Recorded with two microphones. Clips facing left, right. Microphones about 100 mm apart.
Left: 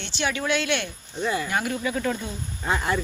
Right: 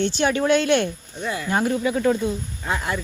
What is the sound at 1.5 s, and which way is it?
Speech, 30° right (ahead or behind).